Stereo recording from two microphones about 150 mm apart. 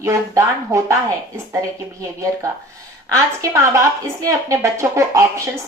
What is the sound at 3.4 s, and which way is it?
Speech, 20° right (ahead or behind).